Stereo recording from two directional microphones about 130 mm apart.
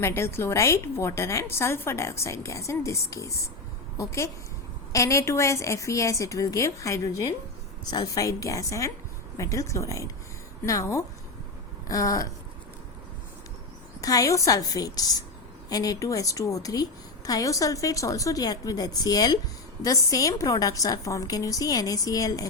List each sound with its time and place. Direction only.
0.0 s a woman's voice: 20° left (ahead or behind)
14.0 s a woman's voice: 25° left (ahead or behind)